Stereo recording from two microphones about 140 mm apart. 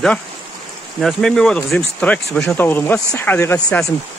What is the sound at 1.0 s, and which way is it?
Speech, 5° left (ahead or behind).